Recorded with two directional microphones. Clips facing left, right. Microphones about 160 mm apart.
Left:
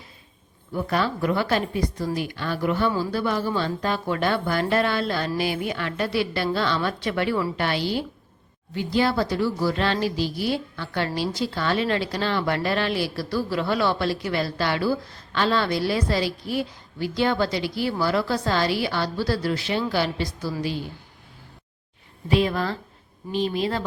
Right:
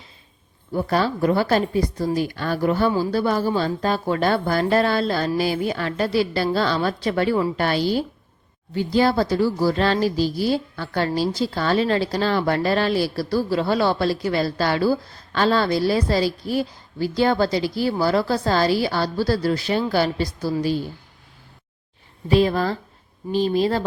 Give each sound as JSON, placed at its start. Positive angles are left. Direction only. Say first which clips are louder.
{"t": 0.7, "sound": "speech", "louder": "right 3 dB", "side_deg": -35}
{"t": 22.3, "sound": "speech", "louder": "right 4 dB", "side_deg": -35}